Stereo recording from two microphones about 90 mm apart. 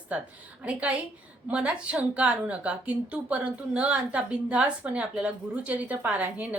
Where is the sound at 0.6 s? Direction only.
15° right (ahead or behind).